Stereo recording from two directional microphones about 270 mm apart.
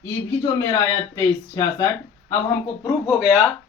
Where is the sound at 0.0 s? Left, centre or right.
Centre.